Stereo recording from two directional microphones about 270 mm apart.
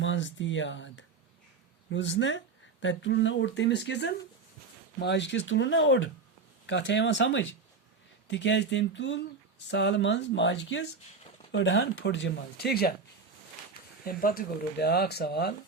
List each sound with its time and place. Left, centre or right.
0.0 s speech: left
14.0 s speech: left